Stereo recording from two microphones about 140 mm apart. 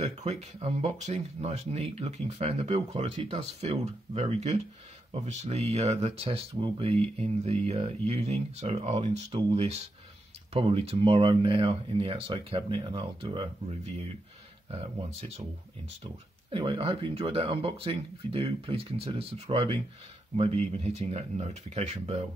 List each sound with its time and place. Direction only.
0.0 s speech: 50° right (ahead or behind)
14.7 s speech: 50° right (ahead or behind)
16.5 s speech: 40° right (ahead or behind)